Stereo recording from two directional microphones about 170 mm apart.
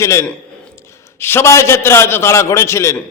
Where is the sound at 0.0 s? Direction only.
15° left (ahead or behind).